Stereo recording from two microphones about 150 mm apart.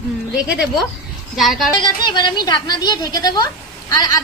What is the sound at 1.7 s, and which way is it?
A woman's voice, 30° left (ahead or behind).